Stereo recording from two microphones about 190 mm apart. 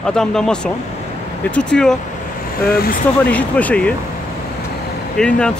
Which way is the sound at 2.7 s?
55° left (ahead or behind).